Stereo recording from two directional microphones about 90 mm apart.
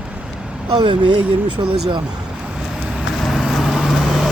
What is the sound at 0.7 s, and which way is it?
Speech, 60° right (ahead or behind).